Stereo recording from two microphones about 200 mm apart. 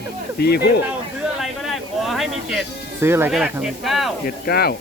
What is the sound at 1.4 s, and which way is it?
Speech, centre (ahead or behind).